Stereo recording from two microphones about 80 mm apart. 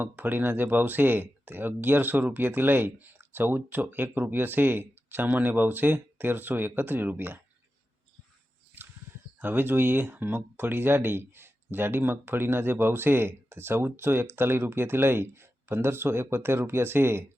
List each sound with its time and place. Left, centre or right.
0.0 s speech: right
9.4 s speech: right